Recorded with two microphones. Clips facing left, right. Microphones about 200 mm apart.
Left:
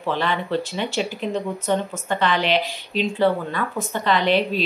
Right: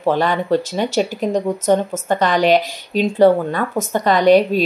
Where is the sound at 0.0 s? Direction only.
45° right (ahead or behind).